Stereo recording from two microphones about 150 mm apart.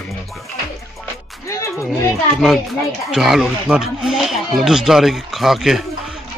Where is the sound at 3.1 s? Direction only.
5° right (ahead or behind).